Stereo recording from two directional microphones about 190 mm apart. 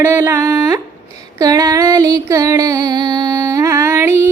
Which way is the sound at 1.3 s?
15° right (ahead or behind).